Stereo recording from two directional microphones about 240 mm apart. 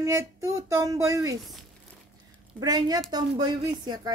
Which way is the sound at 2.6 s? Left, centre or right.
Centre.